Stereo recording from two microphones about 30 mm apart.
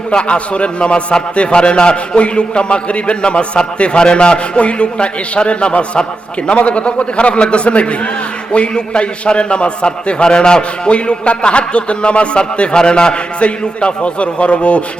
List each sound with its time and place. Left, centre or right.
0.1 s a man's voice: left
13.4 s a man's voice: left